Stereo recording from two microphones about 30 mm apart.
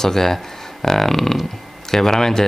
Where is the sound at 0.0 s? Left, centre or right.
Centre.